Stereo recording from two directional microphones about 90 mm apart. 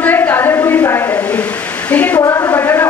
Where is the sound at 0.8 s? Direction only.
35° left (ahead or behind).